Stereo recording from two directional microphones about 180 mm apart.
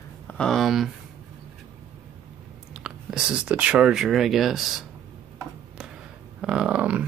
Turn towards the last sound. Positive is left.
turn(degrees=-5)  # may be behind; listen again after turning